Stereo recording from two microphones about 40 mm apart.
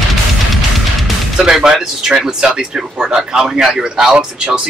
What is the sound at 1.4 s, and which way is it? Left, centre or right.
Speech, centre.